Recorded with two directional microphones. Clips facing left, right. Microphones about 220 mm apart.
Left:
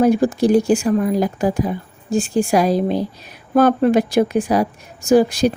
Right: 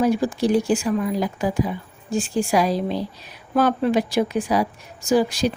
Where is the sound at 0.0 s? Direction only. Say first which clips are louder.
Left 5 dB; 50° left (ahead or behind).